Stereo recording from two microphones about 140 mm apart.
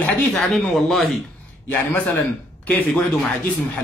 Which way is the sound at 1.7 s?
15° left (ahead or behind).